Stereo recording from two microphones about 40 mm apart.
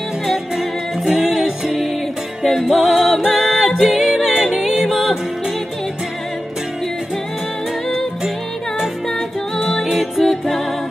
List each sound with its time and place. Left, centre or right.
0.3 s music: centre
3.0 s a capella: centre
4.9 s music: centre
9.8 s music: centre